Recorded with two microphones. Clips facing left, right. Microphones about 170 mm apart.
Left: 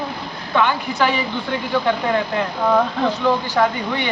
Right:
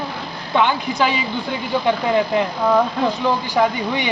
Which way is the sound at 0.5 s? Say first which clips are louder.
Right 1 dB; 15° right (ahead or behind).